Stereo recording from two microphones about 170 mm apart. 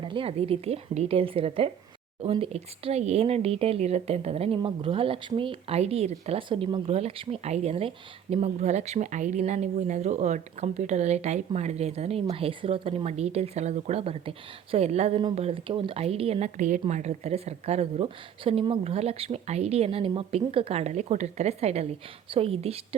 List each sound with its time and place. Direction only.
0.0 s speech: 30° right (ahead or behind)